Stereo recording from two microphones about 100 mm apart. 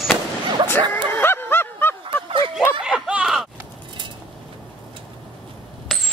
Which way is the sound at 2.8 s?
10° right (ahead or behind).